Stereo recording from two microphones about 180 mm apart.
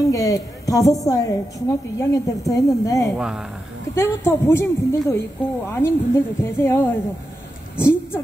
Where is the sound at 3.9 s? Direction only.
15° left (ahead or behind).